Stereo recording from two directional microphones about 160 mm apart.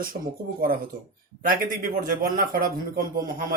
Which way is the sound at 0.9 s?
60° right (ahead or behind).